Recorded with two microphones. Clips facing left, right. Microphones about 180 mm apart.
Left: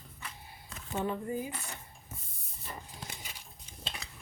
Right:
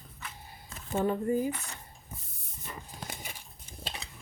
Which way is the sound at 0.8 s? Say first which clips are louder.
Right 5 dB; 40° right (ahead or behind).